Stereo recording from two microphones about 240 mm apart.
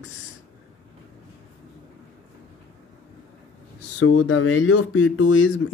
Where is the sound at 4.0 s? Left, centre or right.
Left.